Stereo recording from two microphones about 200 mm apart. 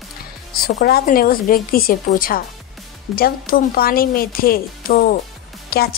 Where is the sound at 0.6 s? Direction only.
50° left (ahead or behind).